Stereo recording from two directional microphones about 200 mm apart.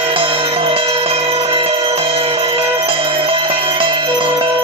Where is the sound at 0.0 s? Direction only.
25° right (ahead or behind).